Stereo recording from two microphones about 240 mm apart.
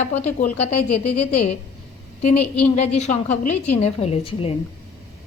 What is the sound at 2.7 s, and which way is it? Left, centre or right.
Speech, left.